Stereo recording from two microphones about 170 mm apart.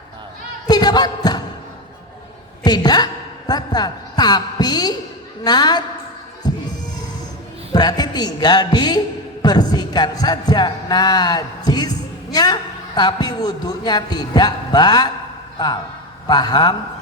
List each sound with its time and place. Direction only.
0.7 s a sound: 25° left (ahead or behind)
2.6 s a woman's voice: 25° left (ahead or behind)
6.4 s heart sounds: 25° left (ahead or behind)
7.7 s a man's voice: 25° left (ahead or behind)